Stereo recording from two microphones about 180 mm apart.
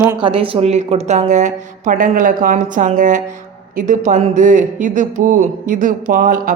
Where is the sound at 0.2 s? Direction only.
30° right (ahead or behind).